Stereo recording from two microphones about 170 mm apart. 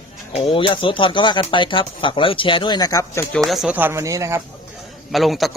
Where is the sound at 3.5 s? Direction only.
5° right (ahead or behind); by 4.4 s 20° right (ahead or behind).